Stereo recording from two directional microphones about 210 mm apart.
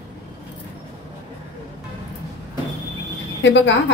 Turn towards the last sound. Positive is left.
turn(degrees=60)  # may be behind; listen again after turning